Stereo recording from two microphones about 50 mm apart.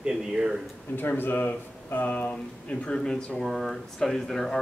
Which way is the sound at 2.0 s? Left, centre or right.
Left.